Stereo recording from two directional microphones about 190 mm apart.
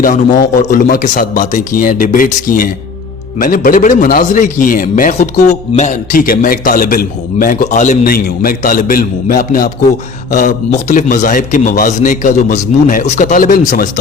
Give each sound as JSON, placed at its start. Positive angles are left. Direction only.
{"t": 0.0, "sound": "a man's voice", "side_deg": 45}